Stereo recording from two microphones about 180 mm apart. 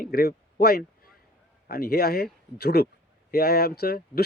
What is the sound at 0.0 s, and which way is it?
Speech, 60° left (ahead or behind).